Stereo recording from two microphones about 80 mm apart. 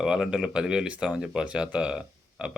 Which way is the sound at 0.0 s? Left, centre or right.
Centre.